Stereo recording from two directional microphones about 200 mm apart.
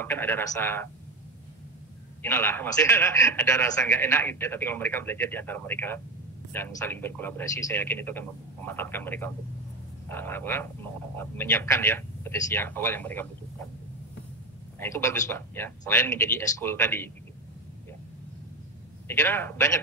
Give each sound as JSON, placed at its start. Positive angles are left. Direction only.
{"t": 0.0, "sound": "a man's voice", "side_deg": 10}
{"t": 2.2, "sound": "a man's voice", "side_deg": 10}
{"t": 14.8, "sound": "a man's voice", "side_deg": 15}
{"t": 19.0, "sound": "a man's voice", "side_deg": 10}